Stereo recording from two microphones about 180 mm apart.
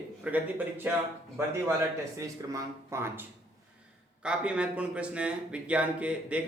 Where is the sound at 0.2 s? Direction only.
5° right (ahead or behind).